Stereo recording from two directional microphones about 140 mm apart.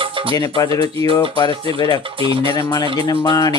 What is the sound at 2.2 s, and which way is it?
Speech, 40° right (ahead or behind).